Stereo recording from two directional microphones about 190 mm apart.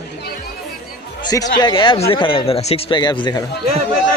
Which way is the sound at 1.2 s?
20° left (ahead or behind).